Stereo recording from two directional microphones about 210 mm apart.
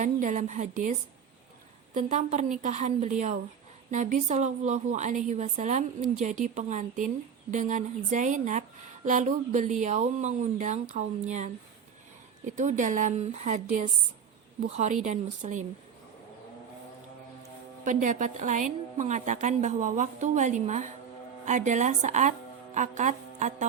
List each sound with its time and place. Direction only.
0.0 s a woman's voice: 35° right (ahead or behind)
17.8 s a woman's voice: 35° right (ahead or behind)